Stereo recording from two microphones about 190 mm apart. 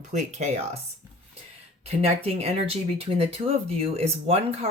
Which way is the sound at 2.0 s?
30° right (ahead or behind).